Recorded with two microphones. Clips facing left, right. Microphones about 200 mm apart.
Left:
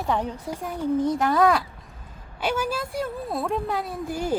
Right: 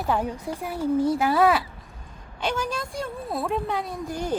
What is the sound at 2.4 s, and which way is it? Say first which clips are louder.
A woman's voice: left 2 dB; 5° left (ahead or behind).